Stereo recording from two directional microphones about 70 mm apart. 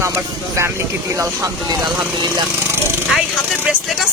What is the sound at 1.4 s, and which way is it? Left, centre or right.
Speech, right.